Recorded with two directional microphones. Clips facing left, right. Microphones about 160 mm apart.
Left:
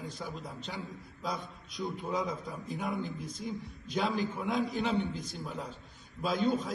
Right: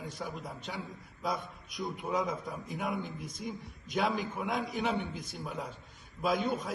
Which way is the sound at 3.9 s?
10° right (ahead or behind).